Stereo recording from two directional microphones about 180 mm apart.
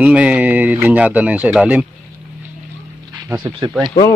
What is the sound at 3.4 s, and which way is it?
Speech, 25° right (ahead or behind).